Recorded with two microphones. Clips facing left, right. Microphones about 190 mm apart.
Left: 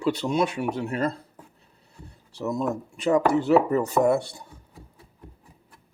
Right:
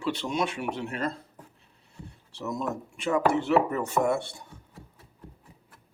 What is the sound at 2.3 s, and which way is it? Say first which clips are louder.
Speech: left 5 dB; 35° left (ahead or behind).